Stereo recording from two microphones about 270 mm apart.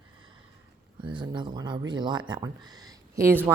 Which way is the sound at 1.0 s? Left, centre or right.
Centre.